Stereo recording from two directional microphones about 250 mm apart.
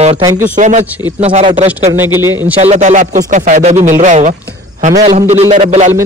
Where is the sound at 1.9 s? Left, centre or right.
Centre.